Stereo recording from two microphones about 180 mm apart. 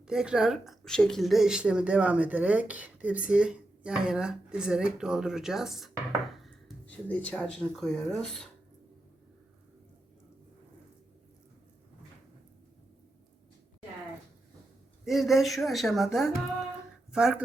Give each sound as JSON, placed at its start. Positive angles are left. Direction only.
{"t": 0.0, "sound": "speech", "side_deg": -5}
{"t": 15.0, "sound": "speech", "side_deg": 0}